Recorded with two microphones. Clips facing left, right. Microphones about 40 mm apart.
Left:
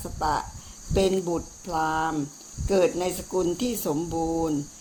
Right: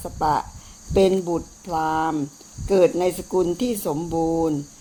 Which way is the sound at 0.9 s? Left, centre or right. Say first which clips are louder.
Right 6 dB; right.